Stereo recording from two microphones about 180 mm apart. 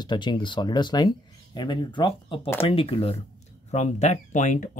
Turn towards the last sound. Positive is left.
turn(degrees=40)  # may be behind; listen again after turning